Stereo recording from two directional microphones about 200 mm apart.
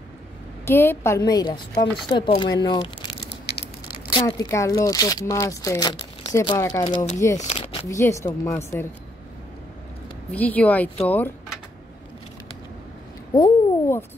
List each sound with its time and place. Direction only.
0.7 s a woman's voice: 10° left (ahead or behind)
3.3 s a sound: 55° left (ahead or behind)
4.1 s a woman's voice: 20° left (ahead or behind)
7.3 s speech: 30° left (ahead or behind)
7.9 s speech: 15° left (ahead or behind)
10.3 s speech: 10° left (ahead or behind)
13.3 s a sound: 15° left (ahead or behind)